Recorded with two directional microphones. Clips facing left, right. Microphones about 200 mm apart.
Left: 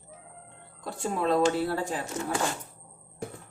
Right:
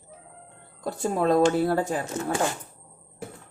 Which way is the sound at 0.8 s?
40° right (ahead or behind).